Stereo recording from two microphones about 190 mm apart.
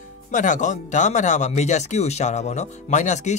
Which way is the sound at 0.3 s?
40° left (ahead or behind).